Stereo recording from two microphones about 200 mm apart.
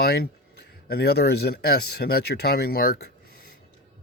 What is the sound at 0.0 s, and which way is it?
Speech, 55° left (ahead or behind).